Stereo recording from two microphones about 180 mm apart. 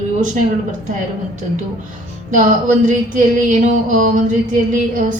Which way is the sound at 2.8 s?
45° right (ahead or behind).